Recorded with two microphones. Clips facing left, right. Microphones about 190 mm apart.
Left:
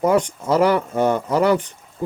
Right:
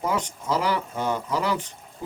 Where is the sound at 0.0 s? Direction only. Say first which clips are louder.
Left 9 dB; 60° left (ahead or behind).